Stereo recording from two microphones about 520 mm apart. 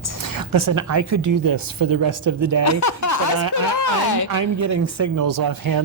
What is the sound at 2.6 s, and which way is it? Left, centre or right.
Speech, left.